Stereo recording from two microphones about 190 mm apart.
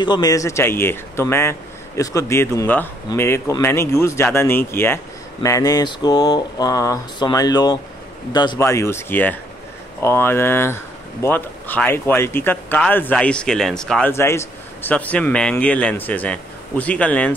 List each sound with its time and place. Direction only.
0.0 s speech: 20° left (ahead or behind)